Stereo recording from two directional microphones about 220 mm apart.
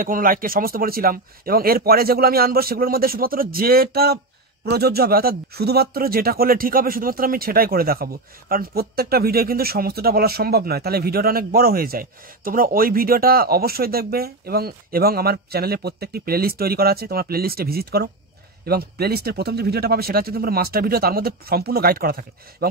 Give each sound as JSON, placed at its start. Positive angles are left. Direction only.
{"t": 0.0, "sound": "a man's voice", "side_deg": -40}